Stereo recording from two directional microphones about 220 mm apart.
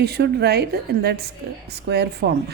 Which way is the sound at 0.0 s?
45° right (ahead or behind).